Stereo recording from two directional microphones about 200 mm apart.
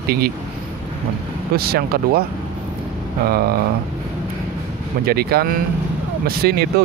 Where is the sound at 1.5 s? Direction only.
50° right (ahead or behind).